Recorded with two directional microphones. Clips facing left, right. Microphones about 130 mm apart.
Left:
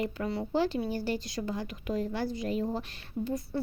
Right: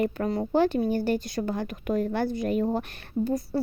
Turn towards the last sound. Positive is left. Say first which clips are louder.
# right 6 dB
turn(degrees=-55)  # may be behind; listen again after turning